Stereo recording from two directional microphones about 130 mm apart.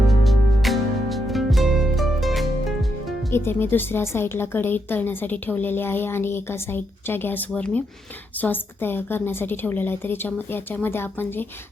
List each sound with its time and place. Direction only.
0.1 s music: centre (ahead or behind)
3.3 s a woman's voice: 15° left (ahead or behind)